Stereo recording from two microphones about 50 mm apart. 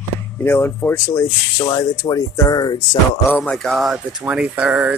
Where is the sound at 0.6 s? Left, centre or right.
Left.